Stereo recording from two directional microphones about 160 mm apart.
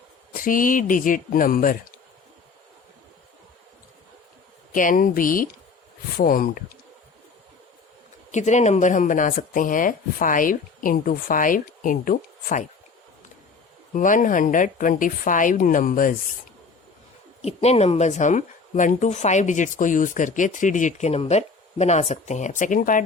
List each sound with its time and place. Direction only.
0.3 s speech: 60° left (ahead or behind)
4.7 s speech: 55° left (ahead or behind)
8.3 s speech: 45° left (ahead or behind)
13.9 s speech: 55° left (ahead or behind)
17.4 s a woman's voice: 40° left (ahead or behind)